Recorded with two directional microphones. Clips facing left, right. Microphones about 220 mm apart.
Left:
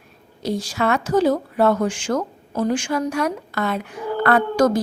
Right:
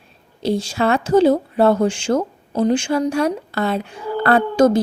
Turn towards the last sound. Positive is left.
turn(degrees=-25)  # may be behind; listen again after turning